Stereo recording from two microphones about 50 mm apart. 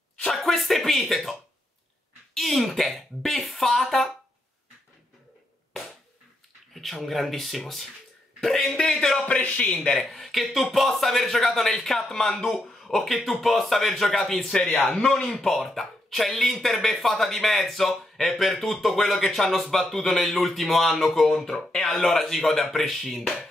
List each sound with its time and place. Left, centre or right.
0.3 s a sound: centre
2.3 s speech: centre
6.7 s speech: centre
9.4 s speech: left
9.9 s speech: centre
15.0 s speech: left
15.3 s speech: centre